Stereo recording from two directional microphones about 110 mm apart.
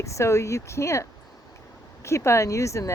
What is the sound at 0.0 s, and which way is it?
Speech, 25° left (ahead or behind).